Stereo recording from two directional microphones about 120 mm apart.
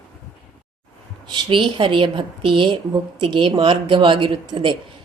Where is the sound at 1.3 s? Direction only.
45° right (ahead or behind).